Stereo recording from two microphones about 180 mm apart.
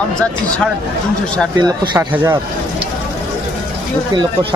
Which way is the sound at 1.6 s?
15° right (ahead or behind).